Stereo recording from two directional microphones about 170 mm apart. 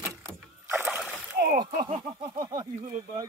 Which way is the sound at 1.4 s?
65° right (ahead or behind).